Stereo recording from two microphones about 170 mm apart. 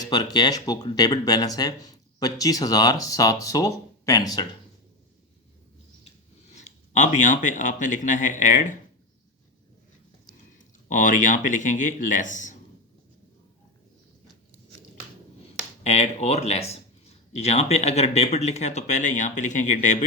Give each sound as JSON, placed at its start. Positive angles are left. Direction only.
{"t": 0.0, "sound": "speech", "side_deg": 25}
{"t": 6.5, "sound": "speech", "side_deg": 40}
{"t": 10.8, "sound": "speech", "side_deg": 50}
{"t": 15.8, "sound": "speech", "side_deg": 40}